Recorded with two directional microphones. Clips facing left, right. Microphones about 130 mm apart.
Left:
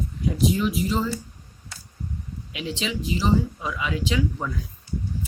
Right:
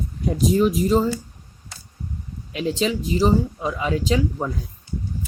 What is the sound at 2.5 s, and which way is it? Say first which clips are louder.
Speech: right 7 dB; 40° right (ahead or behind).